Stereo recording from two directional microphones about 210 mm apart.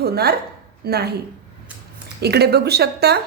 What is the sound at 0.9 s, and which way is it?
Speech, 50° right (ahead or behind).